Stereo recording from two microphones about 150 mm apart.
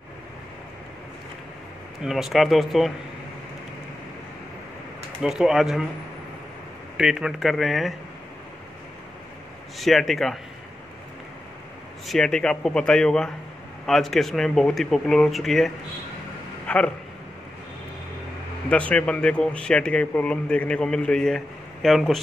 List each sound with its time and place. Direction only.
2.0 s speech: centre (ahead or behind)
5.2 s speech: 5° right (ahead or behind)
7.0 s speech: 5° right (ahead or behind)
9.8 s speech: centre (ahead or behind)
12.1 s speech: 5° left (ahead or behind)
16.6 s a sound: 10° left (ahead or behind)
18.7 s speech: 10° left (ahead or behind)